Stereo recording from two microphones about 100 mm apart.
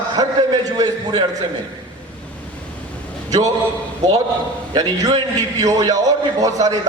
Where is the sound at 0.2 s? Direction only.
40° right (ahead or behind).